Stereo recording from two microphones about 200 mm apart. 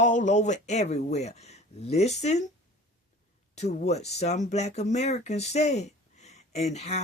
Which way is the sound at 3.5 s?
35° left (ahead or behind).